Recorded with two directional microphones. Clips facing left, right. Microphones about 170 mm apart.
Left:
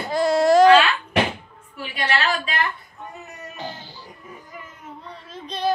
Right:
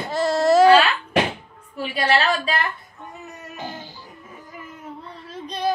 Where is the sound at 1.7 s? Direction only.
30° right (ahead or behind).